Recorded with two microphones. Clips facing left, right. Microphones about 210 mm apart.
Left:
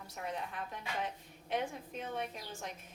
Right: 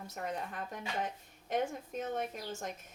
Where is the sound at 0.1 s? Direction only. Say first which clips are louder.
Right 1 dB; 45° right (ahead or behind).